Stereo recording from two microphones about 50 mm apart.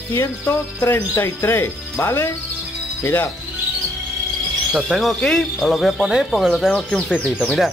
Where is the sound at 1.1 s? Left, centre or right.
Left.